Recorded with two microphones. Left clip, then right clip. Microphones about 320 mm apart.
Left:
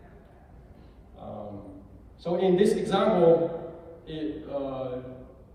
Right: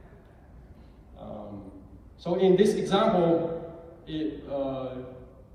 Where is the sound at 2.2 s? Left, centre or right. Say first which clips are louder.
Right 1 dB; right.